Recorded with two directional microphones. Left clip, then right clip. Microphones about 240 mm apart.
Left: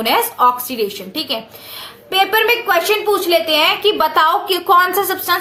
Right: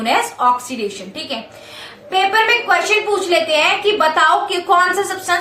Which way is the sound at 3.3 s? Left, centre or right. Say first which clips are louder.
Even; left.